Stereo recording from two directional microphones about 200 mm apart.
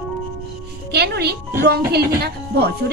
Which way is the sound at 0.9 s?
55° right (ahead or behind).